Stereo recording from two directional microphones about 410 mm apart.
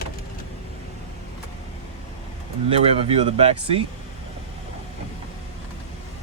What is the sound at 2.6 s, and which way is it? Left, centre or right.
Speech, centre.